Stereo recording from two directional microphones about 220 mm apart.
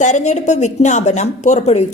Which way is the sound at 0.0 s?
35° left (ahead or behind).